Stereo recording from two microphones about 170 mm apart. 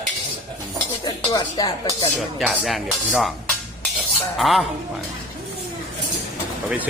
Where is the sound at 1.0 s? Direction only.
25° left (ahead or behind).